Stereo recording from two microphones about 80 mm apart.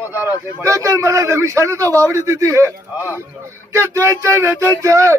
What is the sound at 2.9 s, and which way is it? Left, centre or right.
Speech, right.